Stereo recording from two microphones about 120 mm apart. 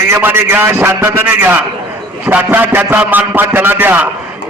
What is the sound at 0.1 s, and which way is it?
A man's voice, 20° right (ahead or behind).